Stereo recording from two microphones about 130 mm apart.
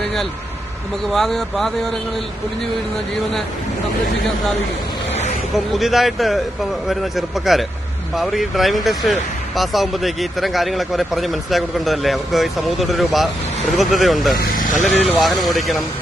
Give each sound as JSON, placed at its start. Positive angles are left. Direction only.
{"t": 1.0, "sound": "speech", "side_deg": 0}
{"t": 5.5, "sound": "speech", "side_deg": 0}
{"t": 14.5, "sound": "vehicle", "side_deg": 85}
{"t": 15.0, "sound": "speech", "side_deg": 0}